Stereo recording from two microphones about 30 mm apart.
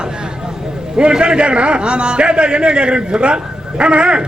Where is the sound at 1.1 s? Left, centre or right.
Right.